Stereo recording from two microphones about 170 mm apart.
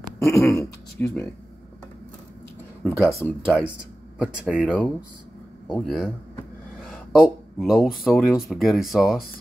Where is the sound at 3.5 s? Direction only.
10° left (ahead or behind).